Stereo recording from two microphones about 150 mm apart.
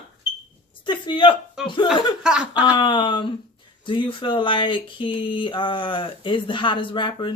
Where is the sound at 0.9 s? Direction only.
35° left (ahead or behind).